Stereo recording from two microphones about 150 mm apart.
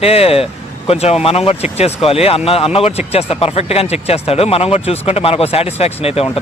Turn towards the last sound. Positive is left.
turn(degrees=40)  # may be behind; listen again after turning